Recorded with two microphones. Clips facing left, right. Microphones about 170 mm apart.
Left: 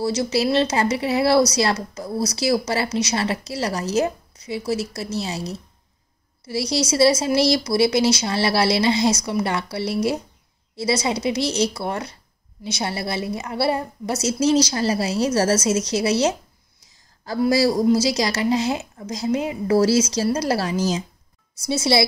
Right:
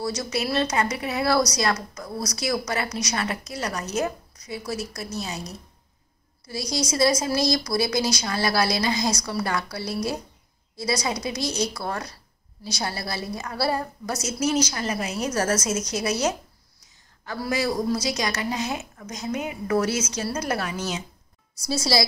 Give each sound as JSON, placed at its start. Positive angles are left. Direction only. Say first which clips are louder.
{"t": 0.0, "sound": "speech", "louder": "left 6 dB", "side_deg": 25}
{"t": 17.5, "sound": "a woman's voice", "louder": "left 7 dB", "side_deg": 35}
{"t": 21.6, "sound": "speech", "louder": "left 4 dB", "side_deg": 25}